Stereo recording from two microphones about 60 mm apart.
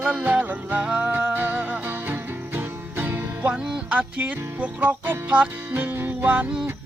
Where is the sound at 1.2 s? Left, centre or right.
Right.